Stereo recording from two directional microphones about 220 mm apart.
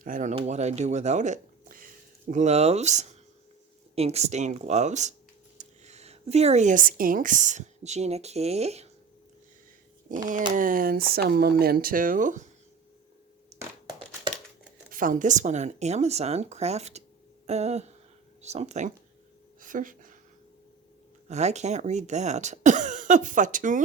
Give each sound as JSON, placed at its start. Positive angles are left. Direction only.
{"t": 0.0, "sound": "a woman's voice", "side_deg": -35}
{"t": 10.1, "sound": "speech", "side_deg": -35}
{"t": 13.6, "sound": "a sound", "side_deg": -15}
{"t": 14.8, "sound": "speech", "side_deg": -40}
{"t": 17.4, "sound": "a sound", "side_deg": -30}
{"t": 18.4, "sound": "speech", "side_deg": -30}
{"t": 21.2, "sound": "speech", "side_deg": -30}